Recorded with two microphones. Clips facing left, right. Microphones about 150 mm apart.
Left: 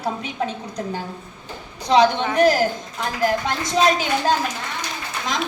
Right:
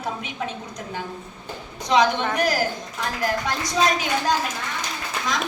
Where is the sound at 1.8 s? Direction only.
30° left (ahead or behind).